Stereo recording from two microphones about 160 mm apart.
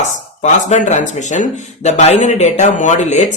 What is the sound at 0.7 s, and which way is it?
Speech, 50° left (ahead or behind).